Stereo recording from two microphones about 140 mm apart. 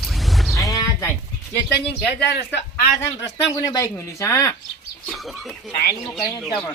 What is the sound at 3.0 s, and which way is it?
Speech, 20° left (ahead or behind).